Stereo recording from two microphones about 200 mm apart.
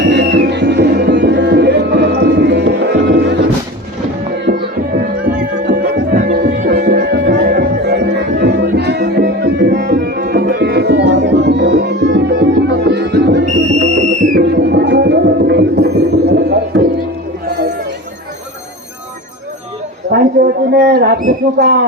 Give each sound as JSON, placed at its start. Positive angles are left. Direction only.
{"t": 0.0, "sound": "music", "side_deg": -60}
{"t": 4.5, "sound": "music", "side_deg": -60}
{"t": 6.1, "sound": "music", "side_deg": -45}
{"t": 13.7, "sound": "music", "side_deg": -35}
{"t": 14.4, "sound": "music", "side_deg": -55}
{"t": 20.1, "sound": "a sound", "side_deg": -55}